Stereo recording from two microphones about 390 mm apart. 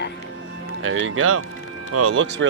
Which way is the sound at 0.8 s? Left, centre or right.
Right.